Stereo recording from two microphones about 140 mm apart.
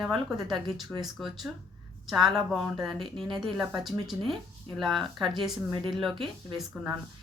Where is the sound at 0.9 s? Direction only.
10° left (ahead or behind).